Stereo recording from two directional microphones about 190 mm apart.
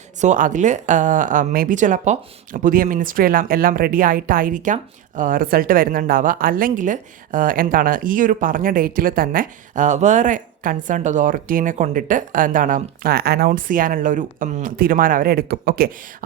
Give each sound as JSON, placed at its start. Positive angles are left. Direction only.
{"t": 0.2, "sound": "a woman's voice", "side_deg": -40}